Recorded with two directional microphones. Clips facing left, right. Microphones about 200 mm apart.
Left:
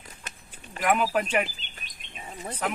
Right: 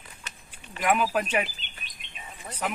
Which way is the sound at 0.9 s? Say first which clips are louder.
Even; 5° right (ahead or behind).